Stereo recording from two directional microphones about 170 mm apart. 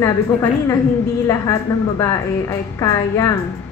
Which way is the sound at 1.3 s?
15° left (ahead or behind).